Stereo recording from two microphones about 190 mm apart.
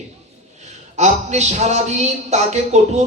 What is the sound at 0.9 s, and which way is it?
A man's voice, 35° right (ahead or behind).